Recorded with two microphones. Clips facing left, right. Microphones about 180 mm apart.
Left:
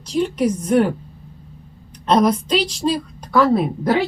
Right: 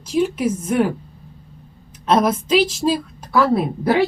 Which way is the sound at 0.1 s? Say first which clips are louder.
Even; 5° right (ahead or behind).